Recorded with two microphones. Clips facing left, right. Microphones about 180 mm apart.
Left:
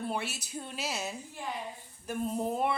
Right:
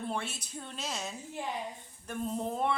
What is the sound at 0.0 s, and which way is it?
A woman's voice, 5° left (ahead or behind).